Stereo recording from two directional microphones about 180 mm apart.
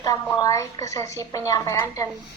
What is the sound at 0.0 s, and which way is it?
A woman's voice, 20° left (ahead or behind).